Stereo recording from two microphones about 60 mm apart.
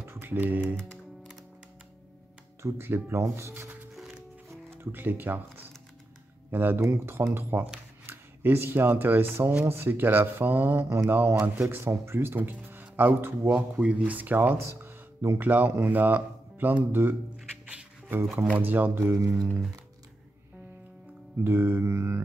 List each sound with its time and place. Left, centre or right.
0.0 s typing: right
2.6 s speech: right
3.9 s music: centre
4.7 s speech: right
6.5 s speech: right
13.5 s speech: right
18.3 s speech: centre
18.6 s speech: right
18.9 s speech: right
21.5 s speech: right